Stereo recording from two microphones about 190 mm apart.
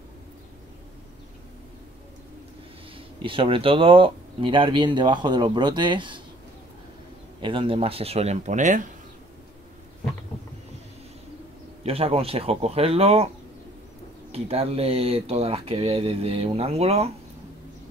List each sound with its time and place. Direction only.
3.2 s speech: 25° right (ahead or behind)
7.4 s speech: 25° right (ahead or behind)
11.8 s speech: 30° right (ahead or behind)
14.3 s speech: 30° right (ahead or behind)